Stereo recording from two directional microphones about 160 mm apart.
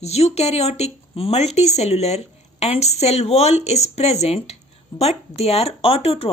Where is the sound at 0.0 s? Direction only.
40° left (ahead or behind).